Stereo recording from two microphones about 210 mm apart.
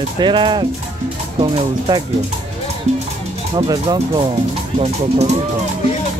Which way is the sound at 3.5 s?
20° right (ahead or behind).